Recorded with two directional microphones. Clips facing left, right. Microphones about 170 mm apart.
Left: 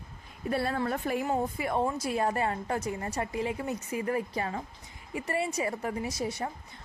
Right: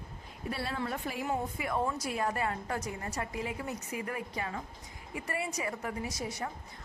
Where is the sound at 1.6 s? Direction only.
30° left (ahead or behind).